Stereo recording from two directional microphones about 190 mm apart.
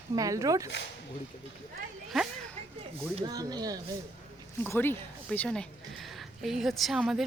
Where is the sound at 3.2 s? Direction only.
20° right (ahead or behind).